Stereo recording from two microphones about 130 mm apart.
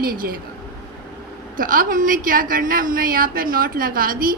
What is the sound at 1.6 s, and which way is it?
Speech, 90° right.